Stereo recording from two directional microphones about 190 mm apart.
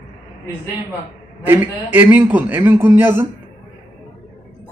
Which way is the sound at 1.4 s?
10° right (ahead or behind).